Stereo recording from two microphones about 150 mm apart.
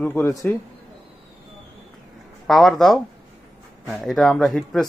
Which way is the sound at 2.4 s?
Centre (ahead or behind).